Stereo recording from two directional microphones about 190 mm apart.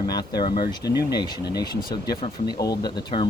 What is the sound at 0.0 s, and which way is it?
Speech, 20° left (ahead or behind).